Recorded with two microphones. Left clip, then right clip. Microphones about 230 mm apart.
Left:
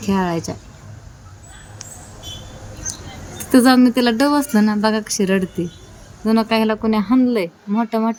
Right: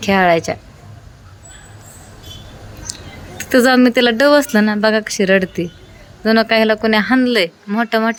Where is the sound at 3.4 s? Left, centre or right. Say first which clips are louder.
Right 2 dB; centre.